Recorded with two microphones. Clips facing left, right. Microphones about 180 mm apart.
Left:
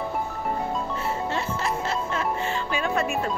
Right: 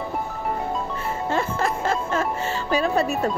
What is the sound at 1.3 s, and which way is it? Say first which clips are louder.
Music: right 4 dB; 50° right (ahead or behind).